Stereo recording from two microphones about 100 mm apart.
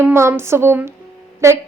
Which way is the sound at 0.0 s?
25° right (ahead or behind).